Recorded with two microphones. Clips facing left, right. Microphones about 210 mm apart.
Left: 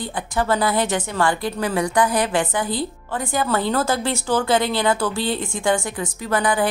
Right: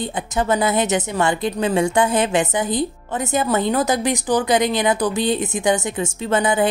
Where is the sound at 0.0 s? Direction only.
20° right (ahead or behind).